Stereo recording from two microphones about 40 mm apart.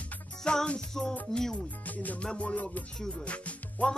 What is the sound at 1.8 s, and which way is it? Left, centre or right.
Music, left.